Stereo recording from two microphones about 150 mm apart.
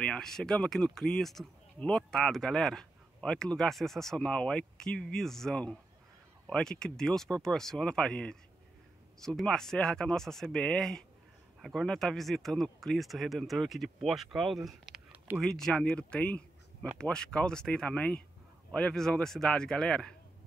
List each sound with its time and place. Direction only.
0.0 s speech: 5° left (ahead or behind)